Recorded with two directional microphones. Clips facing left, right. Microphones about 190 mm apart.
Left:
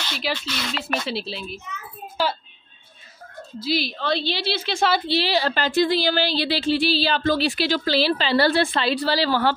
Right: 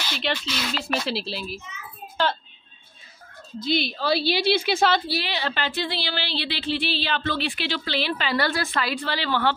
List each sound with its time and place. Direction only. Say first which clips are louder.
0.0 s speech: even; centre (ahead or behind)
3.6 s a woman's voice: even; centre (ahead or behind)
4.7 s speech: even; centre (ahead or behind)
5.0 s a woman's voice: left 6 dB; 30° left (ahead or behind)